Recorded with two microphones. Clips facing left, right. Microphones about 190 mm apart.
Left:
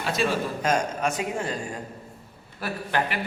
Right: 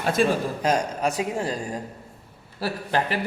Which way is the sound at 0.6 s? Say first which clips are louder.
Even; 35° right (ahead or behind).